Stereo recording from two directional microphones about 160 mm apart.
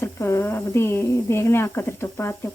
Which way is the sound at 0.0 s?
15° left (ahead or behind).